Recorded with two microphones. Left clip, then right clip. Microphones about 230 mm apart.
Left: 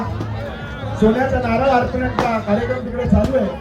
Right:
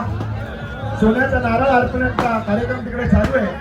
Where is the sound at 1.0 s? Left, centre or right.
Left.